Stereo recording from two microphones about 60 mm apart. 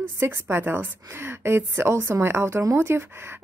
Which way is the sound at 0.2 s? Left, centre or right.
Right.